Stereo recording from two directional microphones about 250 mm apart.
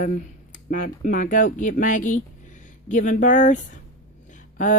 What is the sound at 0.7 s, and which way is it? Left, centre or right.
Speech, left.